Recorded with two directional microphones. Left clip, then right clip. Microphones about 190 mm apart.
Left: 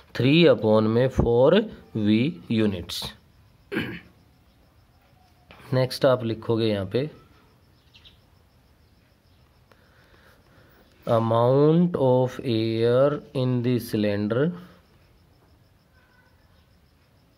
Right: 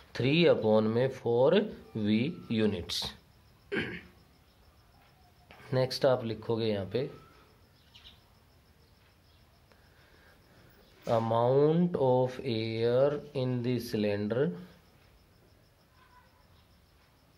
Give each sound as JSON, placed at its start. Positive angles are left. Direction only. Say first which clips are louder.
{"t": 0.1, "sound": "speech", "louder": "left 7 dB", "side_deg": 35}
{"t": 3.6, "sound": "throat clearing", "louder": "left 4 dB", "side_deg": 30}
{"t": 5.5, "sound": "speech", "louder": "left 5 dB", "side_deg": 35}
{"t": 11.1, "sound": "speech", "louder": "left 7 dB", "side_deg": 35}